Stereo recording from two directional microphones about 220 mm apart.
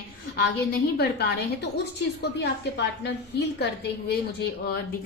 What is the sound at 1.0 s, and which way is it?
A woman's voice, 50° left (ahead or behind).